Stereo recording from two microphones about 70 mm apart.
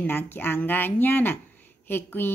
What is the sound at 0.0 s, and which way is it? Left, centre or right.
Speech, left.